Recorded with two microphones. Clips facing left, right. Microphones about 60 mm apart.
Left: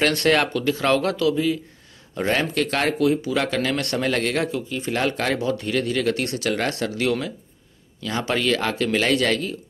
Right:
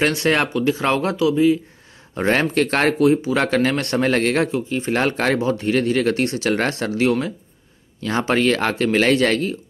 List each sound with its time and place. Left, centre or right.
0.1 s speech: right
2.1 s speech: right